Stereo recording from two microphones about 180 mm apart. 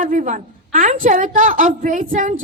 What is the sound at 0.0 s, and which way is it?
A woman's voice, 50° right (ahead or behind).